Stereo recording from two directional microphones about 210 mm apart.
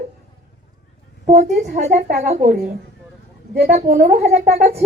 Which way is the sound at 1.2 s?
35° right (ahead or behind).